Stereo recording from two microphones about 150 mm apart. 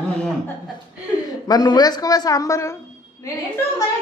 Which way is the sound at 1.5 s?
25° left (ahead or behind).